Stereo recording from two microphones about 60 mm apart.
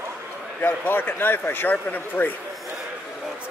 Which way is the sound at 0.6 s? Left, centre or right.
Left.